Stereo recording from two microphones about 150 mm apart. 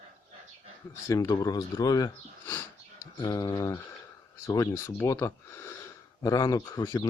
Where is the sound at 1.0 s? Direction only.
20° left (ahead or behind).